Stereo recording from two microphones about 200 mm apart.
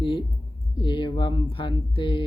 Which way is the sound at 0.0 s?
25° left (ahead or behind).